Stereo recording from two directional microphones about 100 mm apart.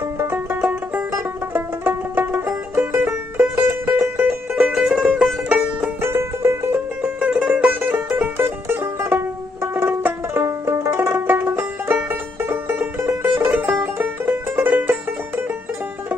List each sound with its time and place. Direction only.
0.2 s music: 20° right (ahead or behind)
6.0 s music: 25° right (ahead or behind)
7.0 s music: 10° right (ahead or behind)